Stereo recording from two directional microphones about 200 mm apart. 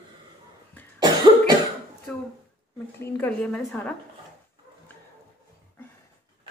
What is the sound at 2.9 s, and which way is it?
A woman's voice, 10° left (ahead or behind).